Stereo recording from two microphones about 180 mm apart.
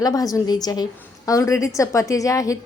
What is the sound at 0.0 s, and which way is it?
A woman's voice, 20° left (ahead or behind).